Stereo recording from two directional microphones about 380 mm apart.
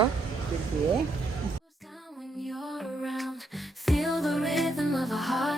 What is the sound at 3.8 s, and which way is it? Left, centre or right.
Music, centre.